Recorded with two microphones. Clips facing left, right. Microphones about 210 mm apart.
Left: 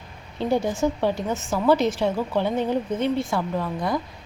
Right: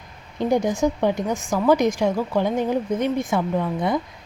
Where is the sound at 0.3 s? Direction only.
15° right (ahead or behind).